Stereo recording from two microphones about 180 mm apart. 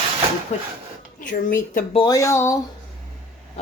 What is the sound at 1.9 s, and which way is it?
Speech, 25° left (ahead or behind).